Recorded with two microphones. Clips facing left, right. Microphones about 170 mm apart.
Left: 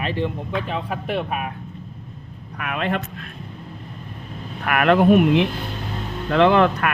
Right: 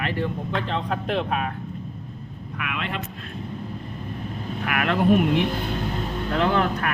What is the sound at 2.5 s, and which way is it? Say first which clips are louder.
Speech: left 6 dB; 45° left (ahead or behind).